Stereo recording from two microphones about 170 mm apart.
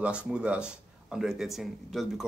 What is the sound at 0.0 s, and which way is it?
A man's voice, 5° right (ahead or behind).